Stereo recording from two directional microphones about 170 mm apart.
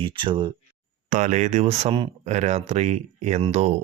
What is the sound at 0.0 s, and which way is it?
Speech, 30° right (ahead or behind).